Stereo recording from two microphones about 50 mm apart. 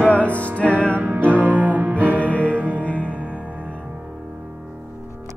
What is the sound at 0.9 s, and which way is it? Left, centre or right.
Music, right.